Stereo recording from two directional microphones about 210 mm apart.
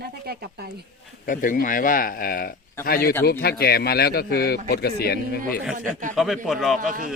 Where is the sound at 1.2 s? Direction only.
40° left (ahead or behind).